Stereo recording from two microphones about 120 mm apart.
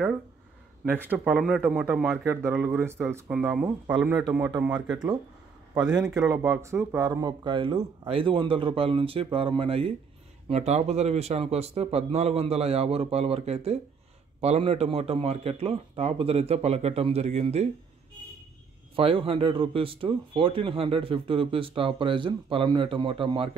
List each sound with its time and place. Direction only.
0.8 s a man's voice: 15° right (ahead or behind)
2.2 s speech: 20° right (ahead or behind)
3.3 s a man's voice: 5° right (ahead or behind)
6.2 s speech: 20° right (ahead or behind); by 9.9 s 50° right (ahead or behind)
10.5 s a man's voice: 65° right (ahead or behind)
18.9 s speech: 50° right (ahead or behind)